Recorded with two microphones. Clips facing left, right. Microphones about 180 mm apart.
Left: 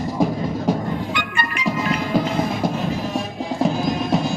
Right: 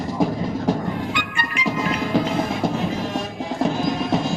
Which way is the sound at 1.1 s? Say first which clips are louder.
Left 2 dB; 55° left (ahead or behind).